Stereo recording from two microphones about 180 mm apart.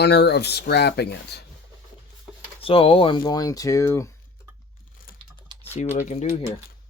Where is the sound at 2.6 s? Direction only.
30° left (ahead or behind).